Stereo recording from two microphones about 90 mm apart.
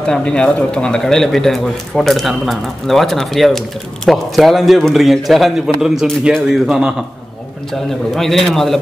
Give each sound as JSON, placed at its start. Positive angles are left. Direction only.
{"t": 0.0, "sound": "a man's voice", "side_deg": 10}
{"t": 8.1, "sound": "speech", "side_deg": 0}